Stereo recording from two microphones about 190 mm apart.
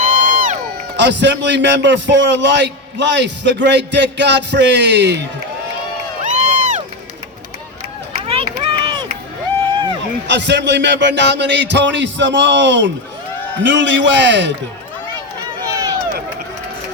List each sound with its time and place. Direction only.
0.0 s crowd: 45° right (ahead or behind)
0.9 s a man's voice: 65° right (ahead or behind)
6.2 s crowd: 40° right (ahead or behind)
8.2 s run: 30° right (ahead or behind)
10.2 s a man's voice: 65° right (ahead or behind)
15.6 s a sound: 20° right (ahead or behind)